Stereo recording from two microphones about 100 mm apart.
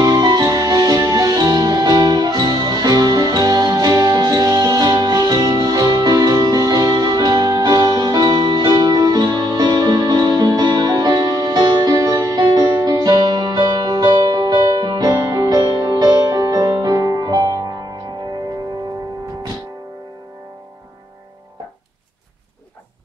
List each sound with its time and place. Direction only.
0.0 s music: 40° right (ahead or behind)